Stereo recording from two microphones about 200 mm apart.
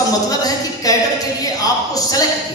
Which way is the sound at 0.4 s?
20° left (ahead or behind).